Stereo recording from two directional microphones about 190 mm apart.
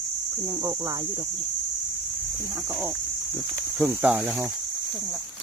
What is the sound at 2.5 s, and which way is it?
Speech, 15° right (ahead or behind).